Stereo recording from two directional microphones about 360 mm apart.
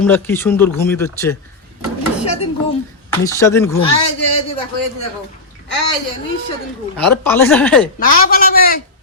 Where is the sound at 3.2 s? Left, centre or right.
Centre.